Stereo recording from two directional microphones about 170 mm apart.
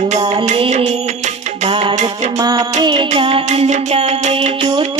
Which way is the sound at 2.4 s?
20° right (ahead or behind).